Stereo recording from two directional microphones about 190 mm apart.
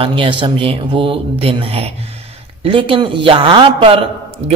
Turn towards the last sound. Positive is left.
turn(degrees=-30)  # may be behind; listen again after turning